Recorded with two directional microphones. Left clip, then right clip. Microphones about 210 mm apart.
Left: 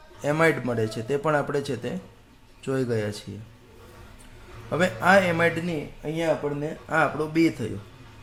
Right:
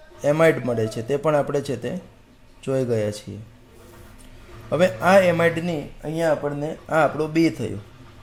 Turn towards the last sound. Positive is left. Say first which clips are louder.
# right 2 dB
turn(degrees=-15)  # may be behind; listen again after turning